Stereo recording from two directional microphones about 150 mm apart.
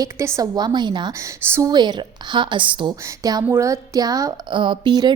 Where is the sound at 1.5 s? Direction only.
15° right (ahead or behind).